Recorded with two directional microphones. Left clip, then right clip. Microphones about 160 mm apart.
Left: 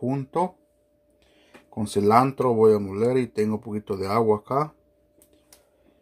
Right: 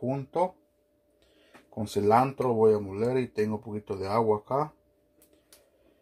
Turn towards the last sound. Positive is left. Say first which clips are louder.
# left 4 dB
turn(degrees=30)  # may be behind; listen again after turning